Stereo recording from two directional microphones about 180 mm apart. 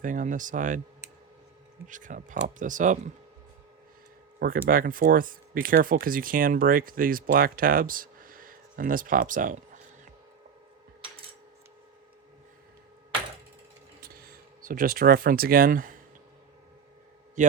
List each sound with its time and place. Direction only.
0.0 s speech: 45° right (ahead or behind)
1.9 s speech: 45° right (ahead or behind)
4.4 s speech: 50° right (ahead or behind)
14.0 s speech: 55° right (ahead or behind)
17.4 s a man's voice: 45° right (ahead or behind)